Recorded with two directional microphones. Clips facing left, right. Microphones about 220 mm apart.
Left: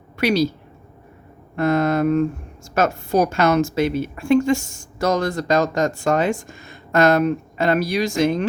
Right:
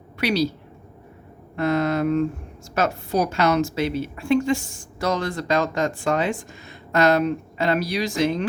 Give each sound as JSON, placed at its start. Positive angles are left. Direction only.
{"t": 0.2, "sound": "speech", "side_deg": 45}
{"t": 1.5, "sound": "a woman's voice", "side_deg": 50}